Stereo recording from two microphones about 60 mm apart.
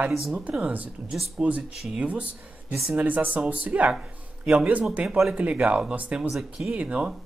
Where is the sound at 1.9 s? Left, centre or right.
Right.